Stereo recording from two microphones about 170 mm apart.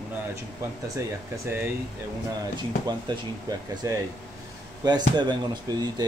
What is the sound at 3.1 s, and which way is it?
Speech, 25° right (ahead or behind).